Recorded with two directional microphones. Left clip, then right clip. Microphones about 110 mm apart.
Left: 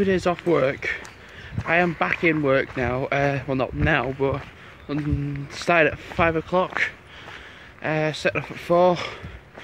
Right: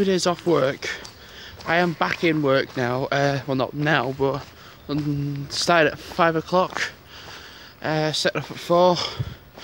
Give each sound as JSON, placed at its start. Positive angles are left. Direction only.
{"t": 0.0, "sound": "speech", "side_deg": -15}
{"t": 0.5, "sound": "speech", "side_deg": -25}
{"t": 7.8, "sound": "speech", "side_deg": -20}